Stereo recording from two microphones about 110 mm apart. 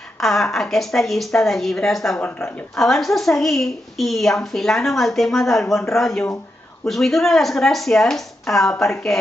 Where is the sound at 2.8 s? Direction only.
5° left (ahead or behind).